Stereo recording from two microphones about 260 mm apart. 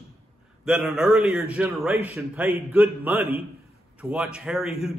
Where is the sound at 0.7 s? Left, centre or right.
Centre.